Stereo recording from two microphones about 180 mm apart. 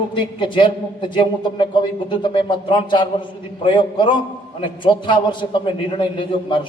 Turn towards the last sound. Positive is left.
turn(degrees=30)  # may be behind; listen again after turning